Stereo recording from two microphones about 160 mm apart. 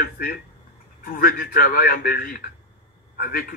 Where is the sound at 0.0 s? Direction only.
70° left (ahead or behind).